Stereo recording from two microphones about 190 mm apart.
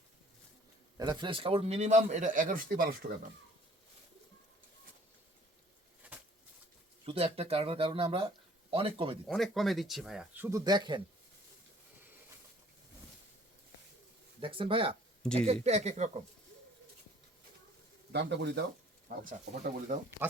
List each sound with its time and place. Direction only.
0.9 s speech: 20° right (ahead or behind); by 2.9 s 50° right (ahead or behind)
7.0 s speech: 30° right (ahead or behind)
9.2 s speech: centre (ahead or behind); by 11.0 s 25° right (ahead or behind)
14.4 s speech: 25° right (ahead or behind)
15.2 s speech: 5° left (ahead or behind)
15.6 s speech: 35° right (ahead or behind)
18.1 s speech: 65° right (ahead or behind)
19.0 s speech: 45° right (ahead or behind)